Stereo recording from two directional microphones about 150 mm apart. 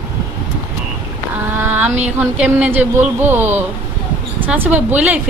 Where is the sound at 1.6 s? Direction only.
15° right (ahead or behind).